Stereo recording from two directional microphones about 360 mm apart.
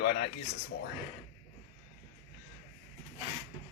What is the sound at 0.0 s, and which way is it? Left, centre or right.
Speech, left.